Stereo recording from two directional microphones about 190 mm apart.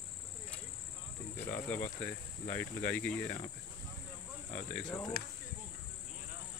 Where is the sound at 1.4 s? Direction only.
10° left (ahead or behind).